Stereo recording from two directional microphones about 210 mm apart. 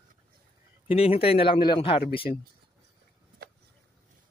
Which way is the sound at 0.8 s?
30° left (ahead or behind).